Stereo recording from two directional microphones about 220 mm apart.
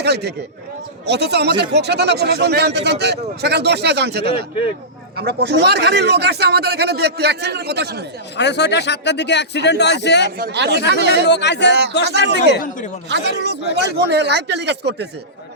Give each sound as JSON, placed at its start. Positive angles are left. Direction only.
{"t": 0.0, "sound": "a man's voice", "side_deg": -50}
{"t": 8.4, "sound": "speech", "side_deg": 50}
{"t": 10.3, "sound": "a man's voice", "side_deg": -45}
{"t": 11.3, "sound": "speech", "side_deg": 50}
{"t": 13.1, "sound": "a man's voice", "side_deg": -50}